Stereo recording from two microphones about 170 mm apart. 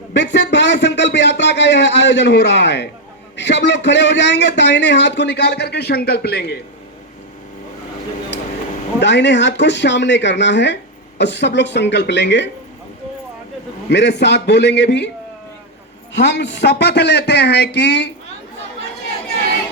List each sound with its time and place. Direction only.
0.1 s a sound: 90° left
3.3 s a man's voice: 90° left; by 6.6 s 75° left (ahead or behind)
9.0 s a man's voice: 90° left
13.9 s a man's voice: 90° left
16.1 s a man's voice: 90° left